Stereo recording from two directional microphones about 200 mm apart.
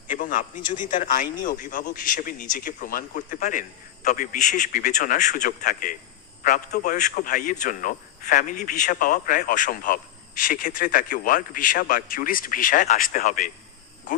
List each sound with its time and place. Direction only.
0.1 s a man's voice: 40° left (ahead or behind)